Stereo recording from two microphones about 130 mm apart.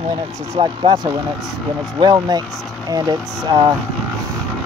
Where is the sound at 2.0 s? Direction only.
30° right (ahead or behind).